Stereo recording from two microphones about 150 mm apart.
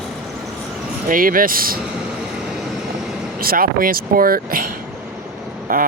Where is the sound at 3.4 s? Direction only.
75° right (ahead or behind).